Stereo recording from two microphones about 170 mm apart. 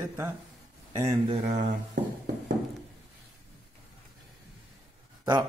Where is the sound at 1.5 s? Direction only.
90° right.